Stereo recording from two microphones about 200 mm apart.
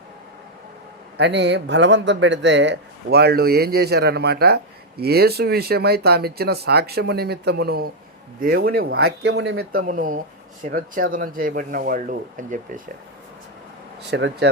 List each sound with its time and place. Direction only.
1.1 s speech: 60° right (ahead or behind)
9.3 s speech: 75° right (ahead or behind)
9.7 s speech: 40° right (ahead or behind)
14.0 s speech: 55° right (ahead or behind)